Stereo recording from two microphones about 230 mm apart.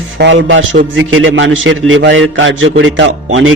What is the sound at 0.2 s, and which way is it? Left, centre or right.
A man's voice, right.